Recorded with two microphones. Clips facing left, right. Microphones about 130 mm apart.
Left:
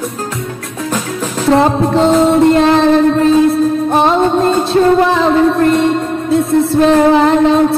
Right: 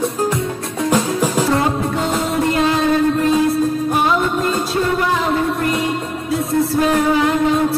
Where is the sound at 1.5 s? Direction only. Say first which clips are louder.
Left 7 dB; 75° left (ahead or behind).